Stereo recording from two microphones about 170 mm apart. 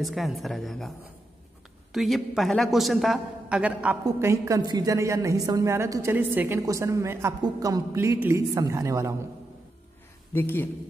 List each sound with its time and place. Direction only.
0.0 s a man's voice: centre (ahead or behind); by 9.1 s 20° right (ahead or behind)
10.3 s speech: 10° left (ahead or behind)